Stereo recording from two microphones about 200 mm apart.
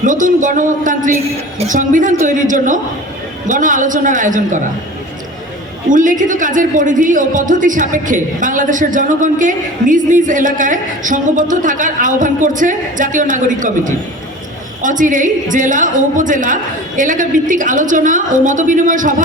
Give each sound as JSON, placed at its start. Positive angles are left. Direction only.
{"t": 0.0, "sound": "a man's voice", "side_deg": -40}
{"t": 5.9, "sound": "a man's voice", "side_deg": -40}